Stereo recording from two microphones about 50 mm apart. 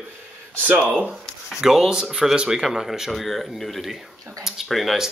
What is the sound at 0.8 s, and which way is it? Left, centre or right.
Speech, right.